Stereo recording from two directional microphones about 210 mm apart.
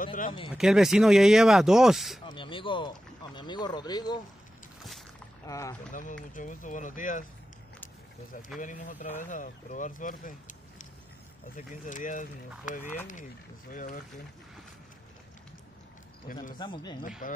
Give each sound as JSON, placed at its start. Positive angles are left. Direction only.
{"t": 0.0, "sound": "speech", "side_deg": 40}
{"t": 0.5, "sound": "speech", "side_deg": 0}
{"t": 2.2, "sound": "snake", "side_deg": 25}
{"t": 3.3, "sound": "speech", "side_deg": 20}
{"t": 5.5, "sound": "speech", "side_deg": 15}
{"t": 6.3, "sound": "speech", "side_deg": 40}
{"t": 8.5, "sound": "speech", "side_deg": 40}
{"t": 16.5, "sound": "speech", "side_deg": 20}
{"t": 17.2, "sound": "speech", "side_deg": 40}